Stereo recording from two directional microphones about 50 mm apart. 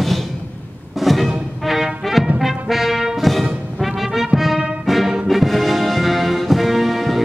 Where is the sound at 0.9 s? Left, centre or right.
Centre.